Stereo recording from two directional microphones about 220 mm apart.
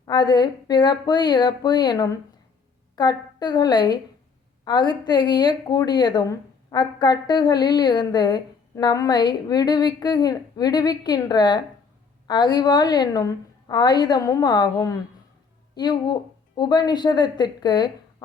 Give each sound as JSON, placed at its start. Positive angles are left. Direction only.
{"t": 0.0, "sound": "a woman's voice", "side_deg": 20}